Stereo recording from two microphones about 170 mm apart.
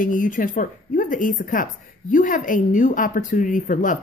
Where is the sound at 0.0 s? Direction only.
50° left (ahead or behind).